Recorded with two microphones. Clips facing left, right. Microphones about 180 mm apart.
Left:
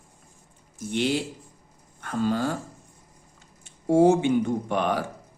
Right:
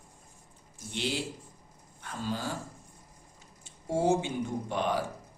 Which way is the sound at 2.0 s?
60° left (ahead or behind).